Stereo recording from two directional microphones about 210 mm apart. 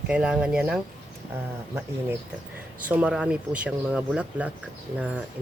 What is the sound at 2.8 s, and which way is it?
Speech, 5° right (ahead or behind).